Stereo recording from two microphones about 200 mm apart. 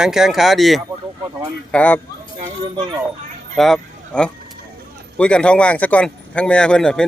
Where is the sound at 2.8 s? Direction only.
20° right (ahead or behind).